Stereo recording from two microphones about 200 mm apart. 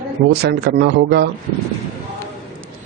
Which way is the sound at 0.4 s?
55° right (ahead or behind).